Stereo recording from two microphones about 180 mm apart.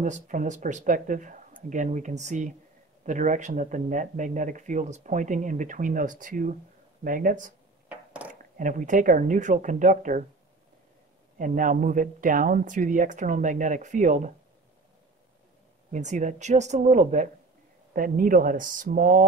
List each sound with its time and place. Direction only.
0.0 s speech: 45° right (ahead or behind)
7.9 s a sound: 10° right (ahead or behind)
8.3 s speech: 45° right (ahead or behind)
11.3 s speech: 45° right (ahead or behind)
15.9 s speech: 40° right (ahead or behind)